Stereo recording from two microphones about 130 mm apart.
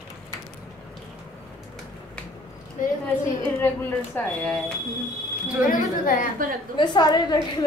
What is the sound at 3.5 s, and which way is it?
Speech, 15° left (ahead or behind).